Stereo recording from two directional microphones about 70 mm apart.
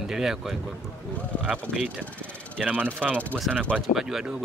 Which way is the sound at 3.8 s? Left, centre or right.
Centre.